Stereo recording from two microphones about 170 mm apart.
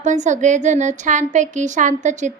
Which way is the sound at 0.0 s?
45° right (ahead or behind).